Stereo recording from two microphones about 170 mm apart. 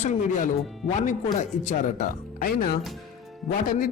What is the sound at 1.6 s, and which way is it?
Speech, 45° left (ahead or behind).